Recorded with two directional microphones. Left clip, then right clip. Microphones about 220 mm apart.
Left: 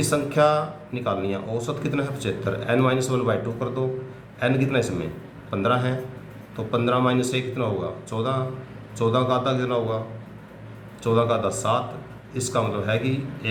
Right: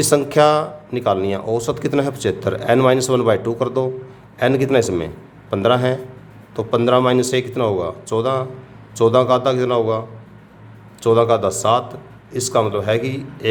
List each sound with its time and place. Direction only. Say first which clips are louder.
0.0 s speech: right 6 dB; 45° right (ahead or behind)
11.0 s speech: right 7 dB; 45° right (ahead or behind)